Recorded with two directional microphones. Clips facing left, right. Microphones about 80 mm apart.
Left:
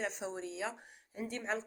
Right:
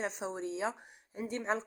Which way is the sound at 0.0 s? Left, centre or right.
Right.